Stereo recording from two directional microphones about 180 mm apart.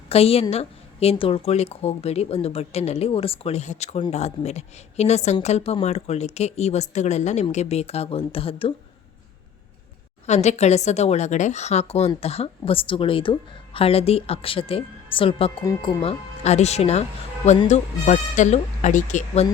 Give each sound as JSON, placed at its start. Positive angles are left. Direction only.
{"t": 0.1, "sound": "speech", "side_deg": 35}
{"t": 10.2, "sound": "speech", "side_deg": 40}